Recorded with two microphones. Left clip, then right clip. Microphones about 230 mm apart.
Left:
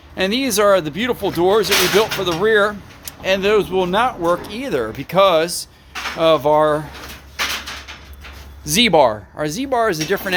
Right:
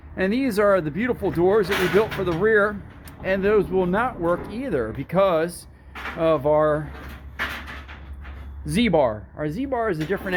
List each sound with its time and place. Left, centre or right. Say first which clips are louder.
0.2 s speech: left 5 dB; centre
8.7 s speech: left 7 dB; centre